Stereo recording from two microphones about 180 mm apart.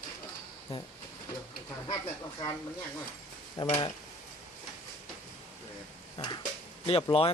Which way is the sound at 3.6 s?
30° left (ahead or behind).